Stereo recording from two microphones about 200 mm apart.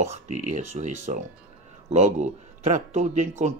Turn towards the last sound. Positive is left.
turn(degrees=-35)  # may be behind; listen again after turning